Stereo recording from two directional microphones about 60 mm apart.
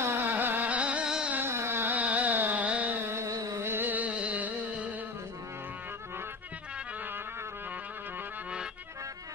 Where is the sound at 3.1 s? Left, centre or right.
Right.